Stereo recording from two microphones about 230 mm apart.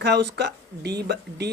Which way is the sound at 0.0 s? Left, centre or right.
Right.